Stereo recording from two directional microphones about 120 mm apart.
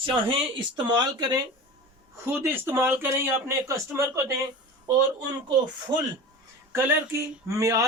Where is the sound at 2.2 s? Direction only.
20° right (ahead or behind).